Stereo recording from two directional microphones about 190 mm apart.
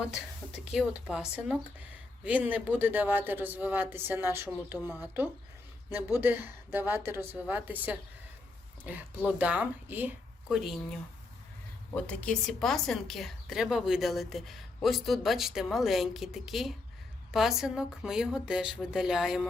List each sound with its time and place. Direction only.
0.7 s speech: 5° right (ahead or behind)
12.0 s a woman's voice: 5° left (ahead or behind)